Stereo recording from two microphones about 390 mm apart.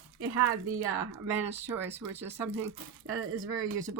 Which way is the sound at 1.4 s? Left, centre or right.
Centre.